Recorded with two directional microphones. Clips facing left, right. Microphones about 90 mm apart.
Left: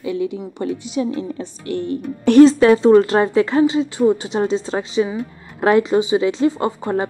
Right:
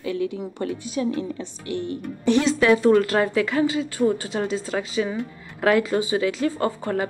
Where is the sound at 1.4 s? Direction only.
45° left (ahead or behind).